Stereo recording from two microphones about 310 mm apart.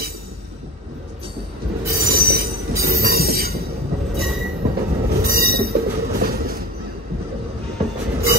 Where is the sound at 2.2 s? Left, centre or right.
Right.